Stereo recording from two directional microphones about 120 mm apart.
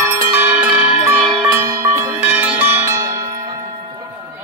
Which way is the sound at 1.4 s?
20° right (ahead or behind).